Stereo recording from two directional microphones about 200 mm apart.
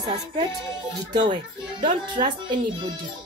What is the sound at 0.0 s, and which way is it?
A woman's voice, 20° right (ahead or behind).